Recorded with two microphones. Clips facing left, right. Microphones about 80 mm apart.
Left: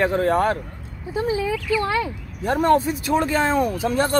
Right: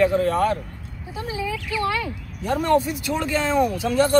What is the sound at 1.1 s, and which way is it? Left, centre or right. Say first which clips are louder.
Speech: left 6 dB; left.